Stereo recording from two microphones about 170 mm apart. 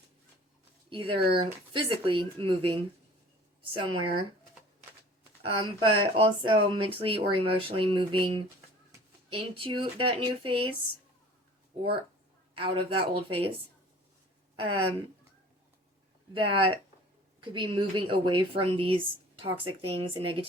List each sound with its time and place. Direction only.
0.9 s speech: 30° right (ahead or behind)
5.4 s speech: 30° right (ahead or behind)
12.5 s speech: 30° right (ahead or behind)
14.5 s speech: 30° right (ahead or behind)
16.3 s speech: 30° right (ahead or behind)